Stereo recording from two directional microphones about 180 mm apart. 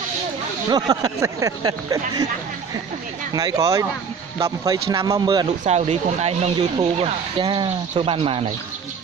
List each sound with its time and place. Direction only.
0.7 s speech: 20° right (ahead or behind)
3.3 s speech: 20° right (ahead or behind)
5.7 s speech: 35° right (ahead or behind)